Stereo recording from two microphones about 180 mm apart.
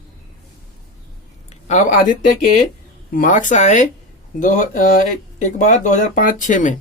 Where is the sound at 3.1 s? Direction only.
45° left (ahead or behind).